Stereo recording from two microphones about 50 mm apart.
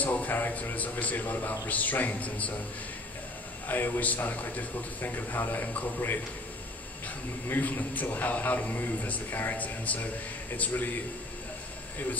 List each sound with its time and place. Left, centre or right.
0.0 s a man's voice: left
3.6 s a man's voice: left
7.4 s a man's voice: left